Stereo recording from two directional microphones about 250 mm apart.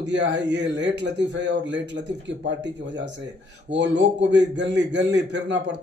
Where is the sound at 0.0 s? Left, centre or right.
Right.